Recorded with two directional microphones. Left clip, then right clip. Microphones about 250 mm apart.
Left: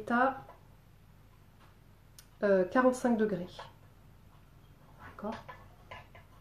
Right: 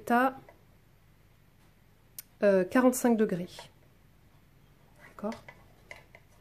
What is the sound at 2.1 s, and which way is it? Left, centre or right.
Tick, right.